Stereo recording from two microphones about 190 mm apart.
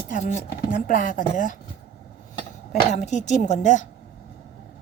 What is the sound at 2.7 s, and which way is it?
A woman's voice, 40° left (ahead or behind).